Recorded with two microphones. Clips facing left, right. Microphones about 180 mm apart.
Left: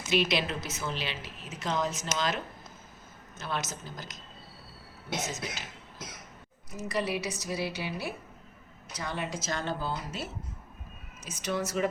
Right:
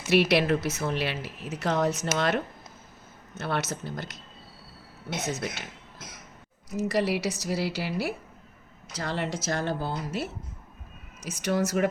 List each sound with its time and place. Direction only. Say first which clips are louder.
0.1 s a woman's voice: right 6 dB; 65° right (ahead or behind)
5.2 s a woman's voice: right 5 dB; 60° right (ahead or behind)
6.7 s a woman's voice: right 5 dB; 70° right (ahead or behind)
11.2 s a woman's voice: right 6 dB; 70° right (ahead or behind)